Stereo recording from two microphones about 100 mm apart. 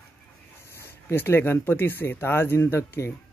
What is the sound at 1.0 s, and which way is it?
Speech, 25° left (ahead or behind).